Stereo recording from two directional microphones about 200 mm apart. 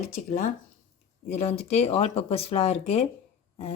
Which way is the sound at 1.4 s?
30° left (ahead or behind).